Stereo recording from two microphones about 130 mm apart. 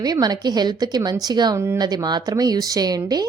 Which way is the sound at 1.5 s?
20° right (ahead or behind).